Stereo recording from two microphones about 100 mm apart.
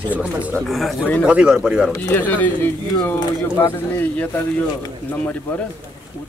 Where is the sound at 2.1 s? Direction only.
20° left (ahead or behind).